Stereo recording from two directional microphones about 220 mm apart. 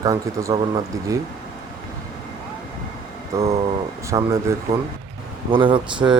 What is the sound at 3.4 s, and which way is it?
Speech, 25° right (ahead or behind).